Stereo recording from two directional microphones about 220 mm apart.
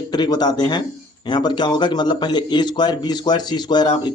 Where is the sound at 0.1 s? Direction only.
20° left (ahead or behind).